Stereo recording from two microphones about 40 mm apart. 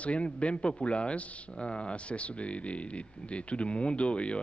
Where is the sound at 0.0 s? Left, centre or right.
Left.